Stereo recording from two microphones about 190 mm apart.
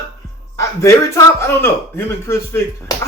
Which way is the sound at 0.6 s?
15° left (ahead or behind).